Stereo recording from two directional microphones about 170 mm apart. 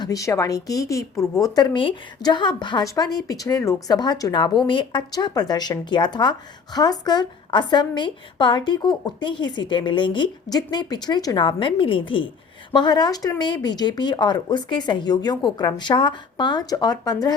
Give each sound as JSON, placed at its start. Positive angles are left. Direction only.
{"t": 0.0, "sound": "a woman's voice", "side_deg": 20}
{"t": 1.5, "sound": "a woman's voice", "side_deg": 30}